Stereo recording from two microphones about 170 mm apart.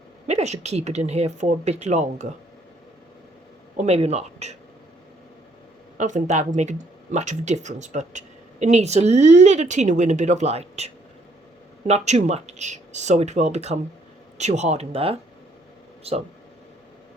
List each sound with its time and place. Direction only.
0.3 s speech: 40° right (ahead or behind)
3.8 s speech: 40° right (ahead or behind)
6.0 s speech: 45° right (ahead or behind)